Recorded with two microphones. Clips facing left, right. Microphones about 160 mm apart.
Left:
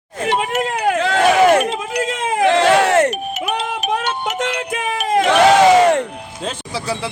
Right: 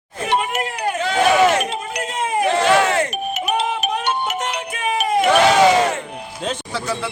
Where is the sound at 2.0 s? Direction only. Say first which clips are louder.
Left 3 dB; 90° left; by 3.1 s 70° left (ahead or behind).